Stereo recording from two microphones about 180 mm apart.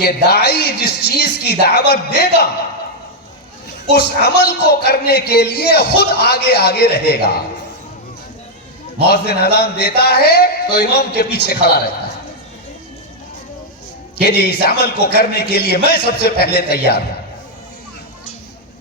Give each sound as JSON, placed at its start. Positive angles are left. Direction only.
{"t": 0.0, "sound": "a man's voice", "side_deg": 65}
{"t": 3.9, "sound": "a man's voice", "side_deg": 65}
{"t": 9.0, "sound": "a man's voice", "side_deg": 65}
{"t": 14.3, "sound": "a man's voice", "side_deg": 65}